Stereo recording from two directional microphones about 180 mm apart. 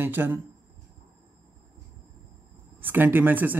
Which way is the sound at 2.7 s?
10° right (ahead or behind).